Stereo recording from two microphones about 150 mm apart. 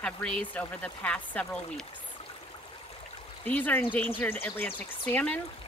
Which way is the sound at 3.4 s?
10° left (ahead or behind).